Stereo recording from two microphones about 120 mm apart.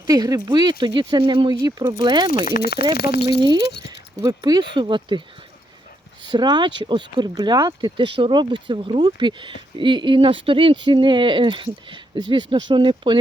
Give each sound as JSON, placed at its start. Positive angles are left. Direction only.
{"t": 0.1, "sound": "speech", "side_deg": -30}
{"t": 1.6, "sound": "speech", "side_deg": -25}
{"t": 2.0, "sound": "speech", "side_deg": -40}
{"t": 6.2, "sound": "speech", "side_deg": -40}